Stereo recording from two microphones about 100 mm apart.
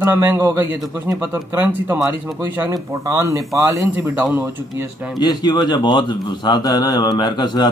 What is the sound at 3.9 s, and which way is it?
Speech, 15° right (ahead or behind).